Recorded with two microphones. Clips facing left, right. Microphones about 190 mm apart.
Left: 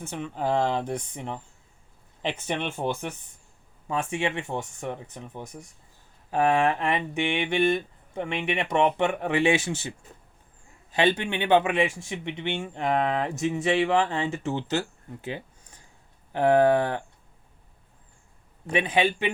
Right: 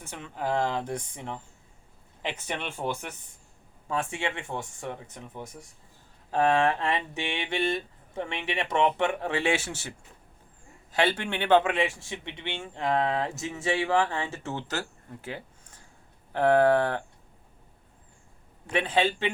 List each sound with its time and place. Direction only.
0.1 s speech: 20° left (ahead or behind)
2.8 s speech: 25° left (ahead or behind)
10.9 s speech: 20° left (ahead or behind)
18.7 s speech: 15° left (ahead or behind)